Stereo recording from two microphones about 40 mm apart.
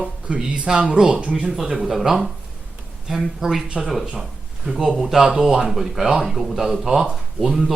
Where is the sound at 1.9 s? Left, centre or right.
Centre.